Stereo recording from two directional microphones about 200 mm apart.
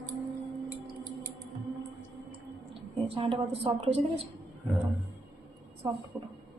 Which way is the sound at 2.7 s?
25° right (ahead or behind).